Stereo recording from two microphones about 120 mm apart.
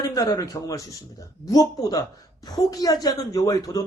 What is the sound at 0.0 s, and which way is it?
A woman's voice, 30° left (ahead or behind).